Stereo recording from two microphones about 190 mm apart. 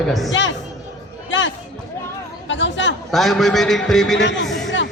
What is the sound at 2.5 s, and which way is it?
Chatter, 75° left (ahead or behind).